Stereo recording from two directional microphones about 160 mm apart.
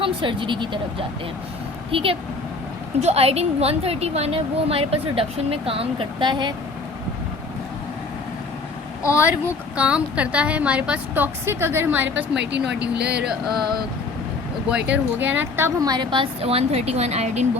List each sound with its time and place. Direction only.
0.0 s a woman's voice: 30° right (ahead or behind)
9.7 s a woman's voice: 10° right (ahead or behind)
12.4 s speech: 90° right
13.2 s music: centre (ahead or behind)
14.8 s a woman's voice: 10° right (ahead or behind); by 17.4 s 45° right (ahead or behind)